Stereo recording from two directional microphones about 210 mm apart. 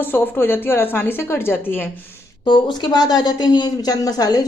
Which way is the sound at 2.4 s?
20° left (ahead or behind).